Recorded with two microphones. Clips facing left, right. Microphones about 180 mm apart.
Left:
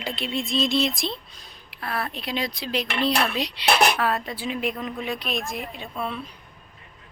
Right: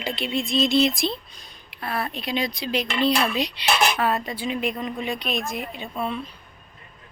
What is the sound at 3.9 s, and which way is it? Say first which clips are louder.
Speech: right 1 dB; centre (ahead or behind).